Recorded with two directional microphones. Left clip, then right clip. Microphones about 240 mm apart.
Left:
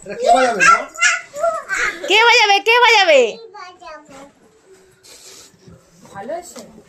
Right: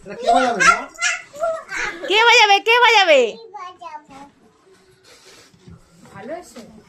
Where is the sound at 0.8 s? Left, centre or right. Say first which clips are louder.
Left 6 dB; centre.